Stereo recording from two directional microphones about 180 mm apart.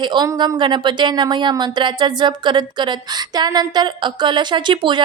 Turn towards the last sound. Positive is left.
turn(degrees=-25)  # may be behind; listen again after turning